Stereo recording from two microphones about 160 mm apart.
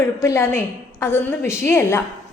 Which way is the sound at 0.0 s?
15° left (ahead or behind).